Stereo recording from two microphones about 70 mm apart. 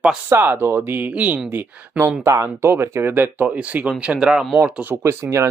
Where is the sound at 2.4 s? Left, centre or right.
Right.